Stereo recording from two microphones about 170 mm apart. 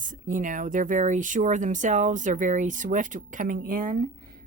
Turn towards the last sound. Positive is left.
turn(degrees=-55)  # may be behind; listen again after turning